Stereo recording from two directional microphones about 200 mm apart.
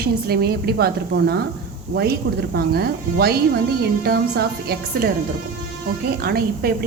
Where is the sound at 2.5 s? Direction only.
50° right (ahead or behind).